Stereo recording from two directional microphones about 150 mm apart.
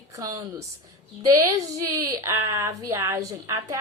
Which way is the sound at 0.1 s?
25° right (ahead or behind).